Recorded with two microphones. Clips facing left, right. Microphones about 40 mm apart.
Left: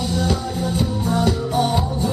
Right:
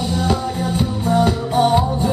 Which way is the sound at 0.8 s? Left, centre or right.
Centre.